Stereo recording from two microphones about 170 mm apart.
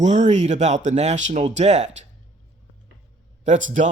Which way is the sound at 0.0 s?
45° right (ahead or behind).